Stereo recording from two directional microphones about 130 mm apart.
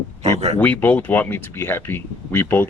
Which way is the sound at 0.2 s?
55° right (ahead or behind).